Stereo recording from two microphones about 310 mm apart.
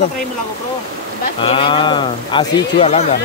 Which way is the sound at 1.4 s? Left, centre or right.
Centre.